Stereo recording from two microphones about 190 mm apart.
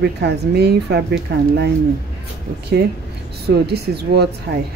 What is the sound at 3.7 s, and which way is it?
Speech, 60° right (ahead or behind).